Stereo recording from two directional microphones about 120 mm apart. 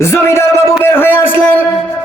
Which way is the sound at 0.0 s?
20° left (ahead or behind).